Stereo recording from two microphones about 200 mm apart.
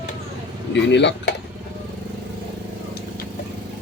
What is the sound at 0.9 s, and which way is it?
Speech, 60° left (ahead or behind).